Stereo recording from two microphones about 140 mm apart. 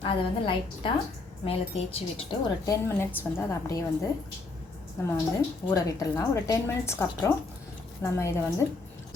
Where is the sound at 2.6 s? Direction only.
20° left (ahead or behind).